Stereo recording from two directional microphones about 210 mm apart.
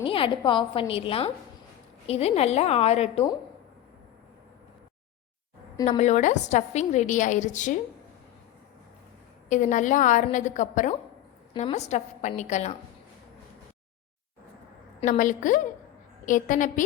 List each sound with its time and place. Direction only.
0.0 s a woman's voice: 25° left (ahead or behind)
6.0 s a woman's voice: 35° left (ahead or behind)
9.5 s a woman's voice: 35° left (ahead or behind)
15.0 s a woman's voice: 40° left (ahead or behind)